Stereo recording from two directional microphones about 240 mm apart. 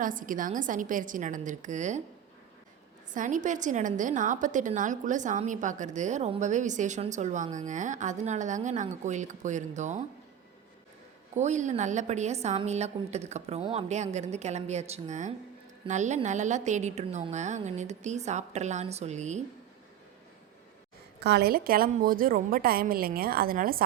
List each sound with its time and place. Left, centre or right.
0.0 s a woman's voice: right
3.1 s a woman's voice: right
11.3 s a woman's voice: right
21.2 s a woman's voice: right